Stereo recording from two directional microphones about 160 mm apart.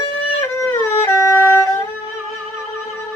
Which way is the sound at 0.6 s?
15° left (ahead or behind).